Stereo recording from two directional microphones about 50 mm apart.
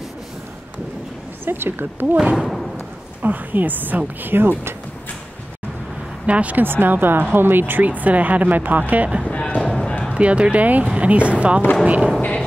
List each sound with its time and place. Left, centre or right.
1.4 s a woman's voice: right
2.4 s thump: centre
3.2 s a woman's voice: right
6.2 s speech: right
6.6 s a woman's voice: right
7.8 s speech: right
9.3 s speech: left
9.6 s basketball bounce: centre
9.8 s basketball bounce: centre
10.1 s speech: right